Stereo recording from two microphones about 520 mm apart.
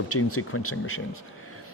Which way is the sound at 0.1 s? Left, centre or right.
Left.